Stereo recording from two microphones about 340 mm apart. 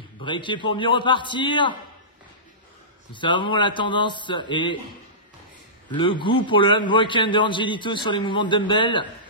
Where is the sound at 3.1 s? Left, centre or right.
Centre.